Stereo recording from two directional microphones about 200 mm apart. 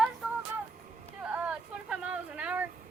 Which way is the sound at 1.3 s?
5° right (ahead or behind).